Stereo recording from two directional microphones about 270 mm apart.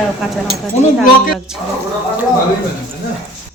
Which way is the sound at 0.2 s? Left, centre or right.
Centre.